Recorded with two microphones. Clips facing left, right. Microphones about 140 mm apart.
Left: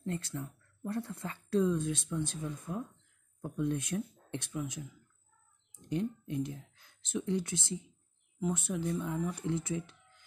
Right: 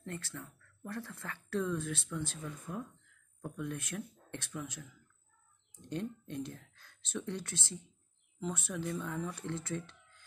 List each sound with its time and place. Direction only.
0.0 s speech: 15° left (ahead or behind)